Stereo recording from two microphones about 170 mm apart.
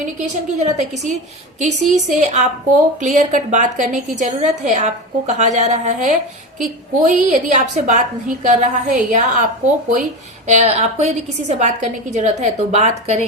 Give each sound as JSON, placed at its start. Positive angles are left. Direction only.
{"t": 0.0, "sound": "a woman's voice", "side_deg": -45}